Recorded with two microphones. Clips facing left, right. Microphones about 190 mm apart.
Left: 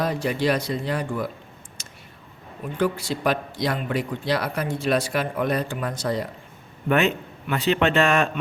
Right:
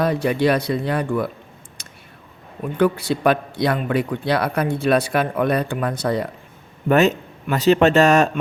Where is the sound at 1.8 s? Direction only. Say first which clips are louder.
Right 1 dB; 60° right (ahead or behind).